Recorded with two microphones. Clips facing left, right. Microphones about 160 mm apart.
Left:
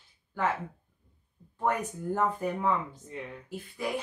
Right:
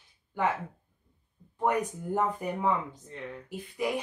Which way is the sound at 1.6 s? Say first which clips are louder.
Right 2 dB; 15° right (ahead or behind).